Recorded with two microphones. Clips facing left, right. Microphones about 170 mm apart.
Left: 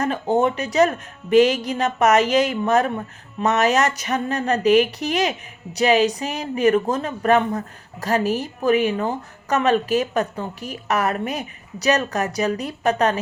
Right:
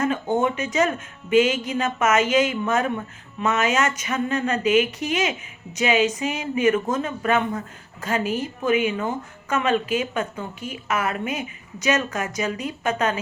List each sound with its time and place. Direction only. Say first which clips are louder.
0.0 s speech: left 2 dB; 35° left (ahead or behind)